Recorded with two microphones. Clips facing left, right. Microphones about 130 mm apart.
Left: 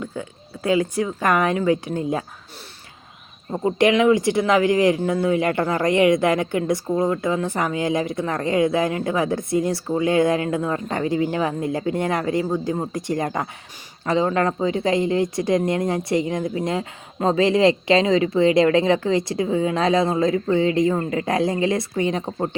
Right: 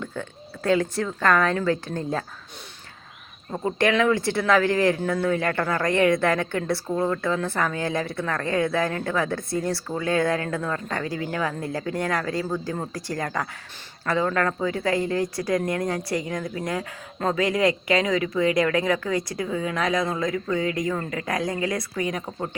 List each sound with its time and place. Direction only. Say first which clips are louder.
0.0 s speech: left 2 dB; 10° left (ahead or behind)
3.5 s speech: left 4 dB; 10° left (ahead or behind); by 22.4 s 25° left (ahead or behind)